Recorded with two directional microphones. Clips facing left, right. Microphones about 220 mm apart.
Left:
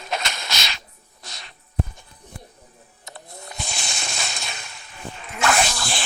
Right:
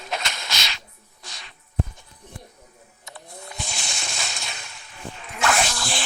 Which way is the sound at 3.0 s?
40° left (ahead or behind).